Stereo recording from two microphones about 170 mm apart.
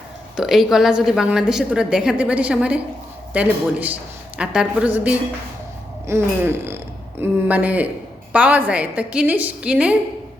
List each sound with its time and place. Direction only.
0.3 s a woman's voice: centre (ahead or behind)